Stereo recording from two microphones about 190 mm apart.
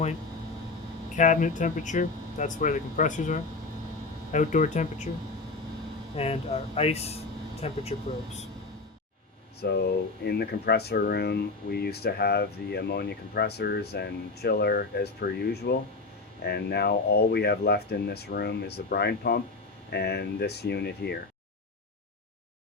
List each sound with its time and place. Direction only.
1.1 s speech: 40° left (ahead or behind)
6.1 s speech: 30° left (ahead or behind)
9.6 s speech: 60° left (ahead or behind)